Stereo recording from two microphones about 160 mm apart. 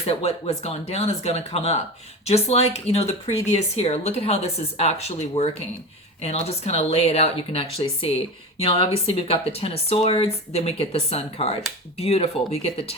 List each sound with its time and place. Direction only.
0.0 s speech: 40° left (ahead or behind)